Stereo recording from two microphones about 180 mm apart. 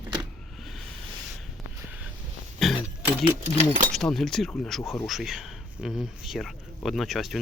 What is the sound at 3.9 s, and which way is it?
Speech, centre (ahead or behind).